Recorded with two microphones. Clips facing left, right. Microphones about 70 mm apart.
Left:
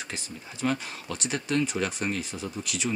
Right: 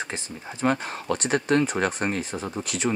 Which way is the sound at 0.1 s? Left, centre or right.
Right.